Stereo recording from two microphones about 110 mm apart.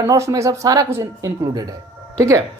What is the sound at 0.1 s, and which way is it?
A woman's voice, 30° right (ahead or behind).